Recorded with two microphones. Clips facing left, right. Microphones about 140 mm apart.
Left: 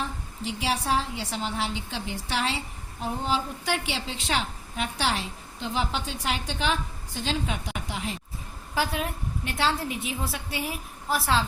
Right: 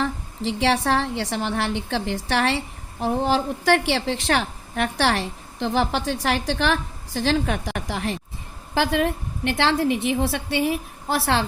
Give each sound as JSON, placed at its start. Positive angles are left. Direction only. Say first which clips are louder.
{"t": 0.0, "sound": "a woman's voice", "louder": "right 7 dB", "side_deg": -85}
{"t": 8.7, "sound": "a woman's voice", "louder": "right 7 dB", "side_deg": -90}